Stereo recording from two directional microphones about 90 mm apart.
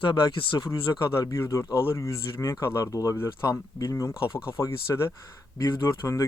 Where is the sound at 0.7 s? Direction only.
40° left (ahead or behind).